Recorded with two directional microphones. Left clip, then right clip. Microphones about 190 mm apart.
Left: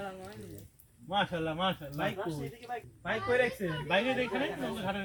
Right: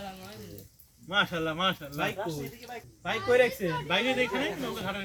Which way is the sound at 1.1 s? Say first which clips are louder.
Right 4 dB; 20° right (ahead or behind).